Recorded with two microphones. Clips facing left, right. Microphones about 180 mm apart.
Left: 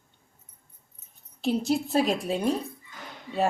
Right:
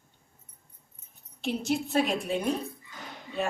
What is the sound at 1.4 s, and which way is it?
A woman's voice, 35° left (ahead or behind).